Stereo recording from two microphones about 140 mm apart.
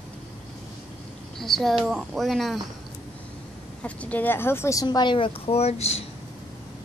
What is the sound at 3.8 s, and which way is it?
A woman's voice, 10° left (ahead or behind).